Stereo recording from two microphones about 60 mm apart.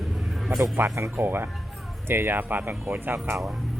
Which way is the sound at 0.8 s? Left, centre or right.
Right.